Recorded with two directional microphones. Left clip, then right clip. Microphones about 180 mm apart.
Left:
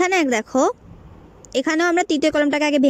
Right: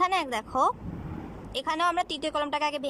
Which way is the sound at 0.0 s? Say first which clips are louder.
Left 8 dB; 40° left (ahead or behind).